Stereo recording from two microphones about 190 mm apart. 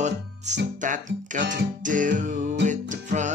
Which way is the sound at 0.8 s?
40° right (ahead or behind).